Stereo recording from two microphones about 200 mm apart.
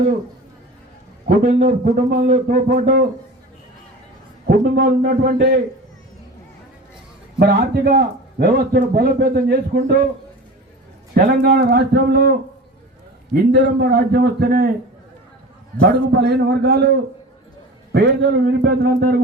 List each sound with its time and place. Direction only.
1.3 s a man's voice: 40° right (ahead or behind)
4.4 s a man's voice: 45° right (ahead or behind)
7.3 s a man's voice: 50° right (ahead or behind)
11.1 s a man's voice: 50° right (ahead or behind)
13.3 s a man's voice: 55° right (ahead or behind)
15.8 s a man's voice: 55° right (ahead or behind)
17.9 s a man's voice: 55° right (ahead or behind)